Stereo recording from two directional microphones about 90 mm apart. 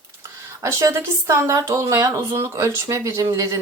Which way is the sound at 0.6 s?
35° right (ahead or behind).